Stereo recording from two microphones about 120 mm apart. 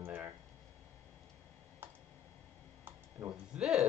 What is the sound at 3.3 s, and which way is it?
Speech, 5° right (ahead or behind).